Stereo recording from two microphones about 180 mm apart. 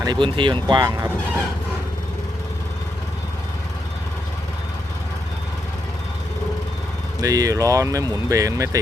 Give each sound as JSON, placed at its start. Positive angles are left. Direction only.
{"t": 0.0, "sound": "speech", "side_deg": -25}
{"t": 7.2, "sound": "speech", "side_deg": -20}